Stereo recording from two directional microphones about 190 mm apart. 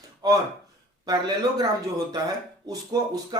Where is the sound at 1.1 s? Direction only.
20° right (ahead or behind).